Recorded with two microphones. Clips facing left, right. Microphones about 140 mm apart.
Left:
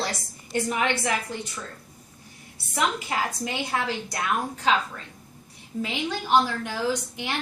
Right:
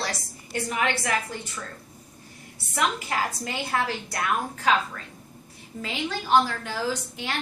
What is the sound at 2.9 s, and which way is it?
A woman's voice, 15° left (ahead or behind).